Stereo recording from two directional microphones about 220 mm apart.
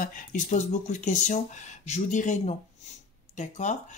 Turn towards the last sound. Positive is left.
turn(degrees=35)  # may be behind; listen again after turning